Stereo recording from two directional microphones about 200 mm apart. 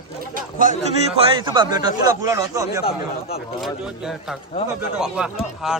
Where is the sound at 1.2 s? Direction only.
25° right (ahead or behind).